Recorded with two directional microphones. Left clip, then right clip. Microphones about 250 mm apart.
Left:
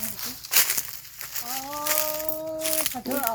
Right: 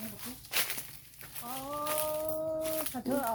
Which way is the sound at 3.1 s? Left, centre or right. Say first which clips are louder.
Left 3 dB; centre.